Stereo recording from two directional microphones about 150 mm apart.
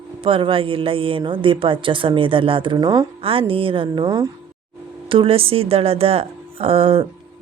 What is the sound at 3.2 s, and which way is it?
Speech, 40° right (ahead or behind).